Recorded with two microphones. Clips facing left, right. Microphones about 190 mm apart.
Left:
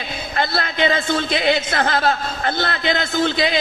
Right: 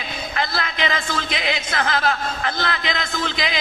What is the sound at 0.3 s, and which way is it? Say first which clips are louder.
A woman's voice: left 5 dB; 35° left (ahead or behind).